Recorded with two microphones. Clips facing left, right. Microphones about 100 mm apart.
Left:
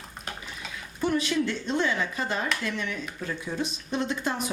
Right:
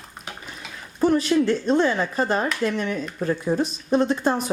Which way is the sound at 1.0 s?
40° right (ahead or behind).